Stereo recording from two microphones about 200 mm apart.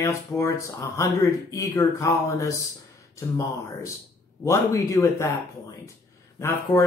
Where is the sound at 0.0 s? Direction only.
15° left (ahead or behind).